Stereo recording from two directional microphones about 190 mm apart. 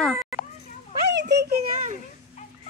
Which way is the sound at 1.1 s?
65° right (ahead or behind).